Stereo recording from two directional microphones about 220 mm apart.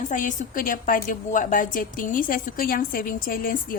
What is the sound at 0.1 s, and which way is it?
A woman's voice, 35° left (ahead or behind).